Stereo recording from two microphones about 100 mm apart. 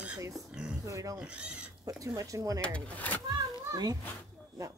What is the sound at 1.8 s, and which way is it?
Speech, 35° right (ahead or behind).